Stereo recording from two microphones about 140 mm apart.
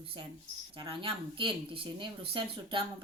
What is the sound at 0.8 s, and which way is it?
Speech, 40° right (ahead or behind).